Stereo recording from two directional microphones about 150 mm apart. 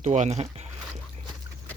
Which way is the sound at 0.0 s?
50° right (ahead or behind).